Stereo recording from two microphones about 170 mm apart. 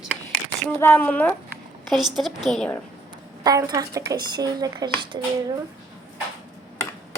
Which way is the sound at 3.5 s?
20° right (ahead or behind).